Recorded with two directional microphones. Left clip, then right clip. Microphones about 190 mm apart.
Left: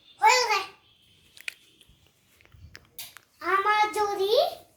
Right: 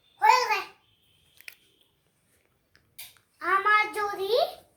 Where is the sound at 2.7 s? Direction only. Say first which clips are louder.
Left 14 dB; 20° left (ahead or behind).